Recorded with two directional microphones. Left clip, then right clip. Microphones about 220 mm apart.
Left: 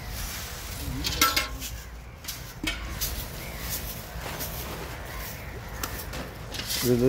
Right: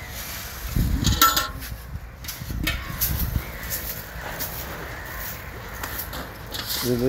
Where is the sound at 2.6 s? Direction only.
40° right (ahead or behind).